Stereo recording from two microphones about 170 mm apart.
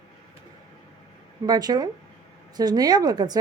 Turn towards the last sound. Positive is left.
turn(degrees=-25)  # may be behind; listen again after turning